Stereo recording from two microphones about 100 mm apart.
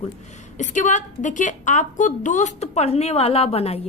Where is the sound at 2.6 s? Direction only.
90° left.